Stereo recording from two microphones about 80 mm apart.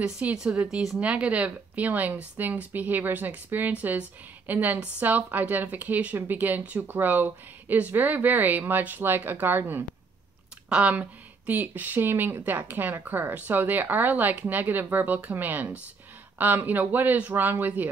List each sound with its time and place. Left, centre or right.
0.0 s speech: centre
10.7 s speech: centre